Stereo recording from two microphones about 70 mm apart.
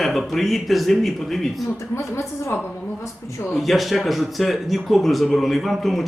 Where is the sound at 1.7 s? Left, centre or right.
Left.